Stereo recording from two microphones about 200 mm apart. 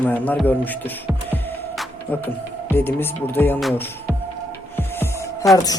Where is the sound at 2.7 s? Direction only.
10° left (ahead or behind).